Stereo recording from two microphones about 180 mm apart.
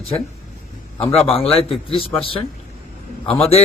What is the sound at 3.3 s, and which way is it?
Speech, 35° left (ahead or behind).